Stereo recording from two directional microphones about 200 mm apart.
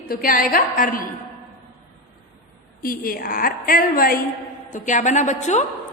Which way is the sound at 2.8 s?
45° left (ahead or behind).